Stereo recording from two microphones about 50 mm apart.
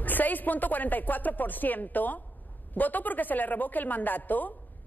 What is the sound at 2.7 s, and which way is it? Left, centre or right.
A woman's voice, left.